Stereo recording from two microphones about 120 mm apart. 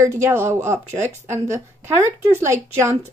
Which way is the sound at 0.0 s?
20° right (ahead or behind).